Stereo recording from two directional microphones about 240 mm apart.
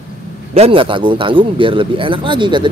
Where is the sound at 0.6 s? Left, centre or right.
Right.